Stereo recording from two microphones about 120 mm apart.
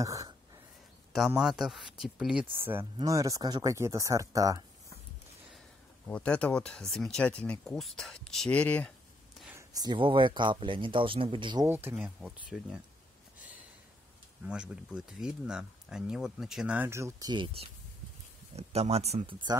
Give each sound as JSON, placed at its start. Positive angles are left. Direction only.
{"t": 0.0, "sound": "speech", "side_deg": -30}
{"t": 1.1, "sound": "speech", "side_deg": -5}
{"t": 2.5, "sound": "speech", "side_deg": -20}
{"t": 6.0, "sound": "speech", "side_deg": 10}
{"t": 9.8, "sound": "speech", "side_deg": -40}
{"t": 11.6, "sound": "speech", "side_deg": -20}
{"t": 12.0, "sound": "speech", "side_deg": -10}
{"t": 14.4, "sound": "speech", "side_deg": -10}
{"t": 16.9, "sound": "speech", "side_deg": -25}
{"t": 17.3, "sound": "speech", "side_deg": -40}
{"t": 18.6, "sound": "speech", "side_deg": -60}